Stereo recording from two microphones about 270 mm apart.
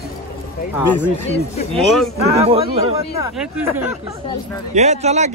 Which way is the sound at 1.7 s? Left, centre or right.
Centre.